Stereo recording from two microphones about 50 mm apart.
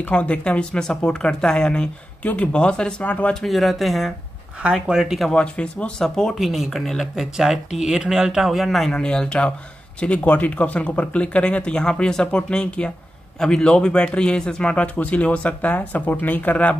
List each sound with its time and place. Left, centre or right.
0.1 s a man's voice: left
3.3 s speech: centre
4.7 s speech: centre
5.3 s a man's voice: left
5.9 s speech: centre
6.3 s speech: centre
8.9 s a man's voice: centre; by 16.7 s left